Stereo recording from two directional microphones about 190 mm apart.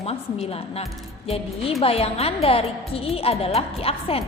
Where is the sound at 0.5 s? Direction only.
30° left (ahead or behind).